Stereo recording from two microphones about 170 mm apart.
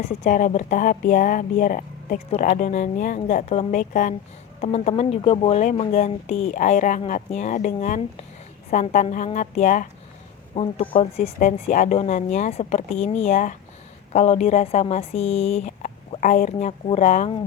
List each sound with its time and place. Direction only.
0.0 s speech: 40° left (ahead or behind)
10.5 s speech: 35° left (ahead or behind)